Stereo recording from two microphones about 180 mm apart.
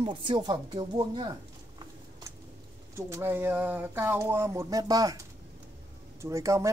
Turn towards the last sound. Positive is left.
turn(degrees=-15)  # may be behind; listen again after turning